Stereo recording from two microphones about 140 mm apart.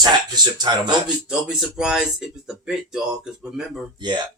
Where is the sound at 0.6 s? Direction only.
30° right (ahead or behind).